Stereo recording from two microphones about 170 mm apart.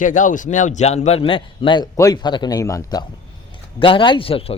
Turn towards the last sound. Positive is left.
turn(degrees=35)  # may be behind; listen again after turning